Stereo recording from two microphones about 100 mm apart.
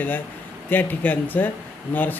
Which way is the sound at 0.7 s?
20° left (ahead or behind).